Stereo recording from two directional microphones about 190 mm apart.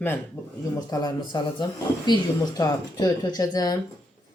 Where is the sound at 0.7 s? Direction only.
20° left (ahead or behind).